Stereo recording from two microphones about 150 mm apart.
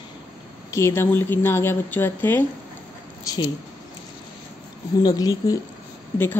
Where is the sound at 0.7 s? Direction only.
20° left (ahead or behind).